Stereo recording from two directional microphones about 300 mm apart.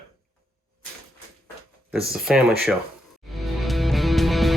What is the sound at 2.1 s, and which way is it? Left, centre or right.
Speech, centre.